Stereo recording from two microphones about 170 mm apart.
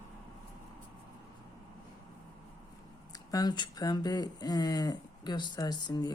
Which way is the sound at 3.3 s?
25° left (ahead or behind).